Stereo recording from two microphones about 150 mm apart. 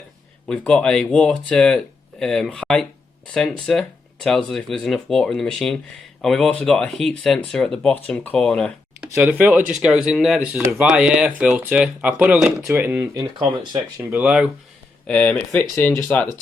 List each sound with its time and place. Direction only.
0.4 s speech: 5° left (ahead or behind)
9.1 s speech: 10° right (ahead or behind)
10.5 s speech: 15° right (ahead or behind)
14.1 s speech: 10° right (ahead or behind)
15.0 s speech: 10° left (ahead or behind)